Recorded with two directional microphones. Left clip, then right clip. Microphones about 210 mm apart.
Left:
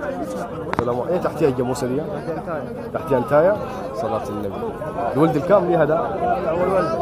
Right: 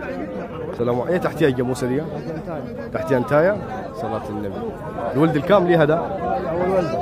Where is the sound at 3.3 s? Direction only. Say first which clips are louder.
Left 2 dB; 20° right (ahead or behind).